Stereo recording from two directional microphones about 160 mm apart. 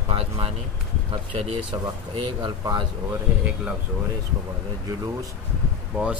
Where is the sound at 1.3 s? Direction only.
35° right (ahead or behind).